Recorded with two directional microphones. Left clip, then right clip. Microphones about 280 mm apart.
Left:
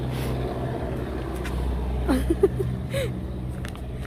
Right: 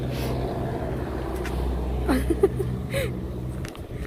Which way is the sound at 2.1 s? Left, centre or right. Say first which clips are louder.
Even; centre.